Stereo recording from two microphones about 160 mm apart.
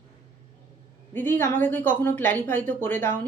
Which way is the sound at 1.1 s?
10° left (ahead or behind).